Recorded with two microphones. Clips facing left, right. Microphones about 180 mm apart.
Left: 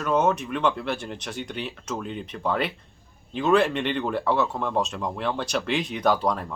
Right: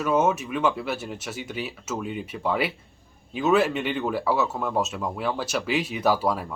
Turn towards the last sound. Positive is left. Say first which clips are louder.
# even
turn(degrees=-5)  # may be behind; listen again after turning